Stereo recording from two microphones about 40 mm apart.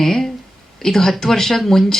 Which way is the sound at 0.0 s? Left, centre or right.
Centre.